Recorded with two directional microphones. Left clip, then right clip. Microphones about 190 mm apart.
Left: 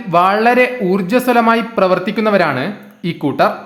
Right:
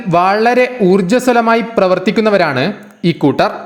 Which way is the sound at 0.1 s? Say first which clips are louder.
Right 1 dB; 20° right (ahead or behind).